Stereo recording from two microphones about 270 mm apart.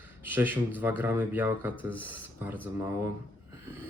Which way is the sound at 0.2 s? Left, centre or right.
Centre.